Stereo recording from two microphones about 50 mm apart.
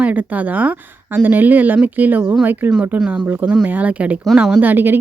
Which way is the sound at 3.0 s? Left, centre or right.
Right.